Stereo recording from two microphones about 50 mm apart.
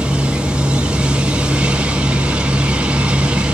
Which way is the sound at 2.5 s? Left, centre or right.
Right.